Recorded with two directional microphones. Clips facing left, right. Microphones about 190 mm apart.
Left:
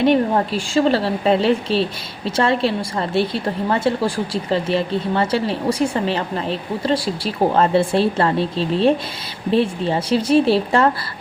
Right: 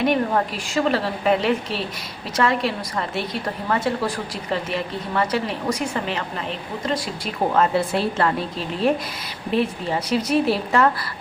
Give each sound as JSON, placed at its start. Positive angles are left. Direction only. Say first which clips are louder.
{"t": 0.0, "sound": "a woman's voice", "louder": "left 4 dB", "side_deg": 30}